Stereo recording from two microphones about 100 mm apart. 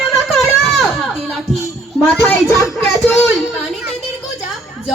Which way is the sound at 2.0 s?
15° left (ahead or behind).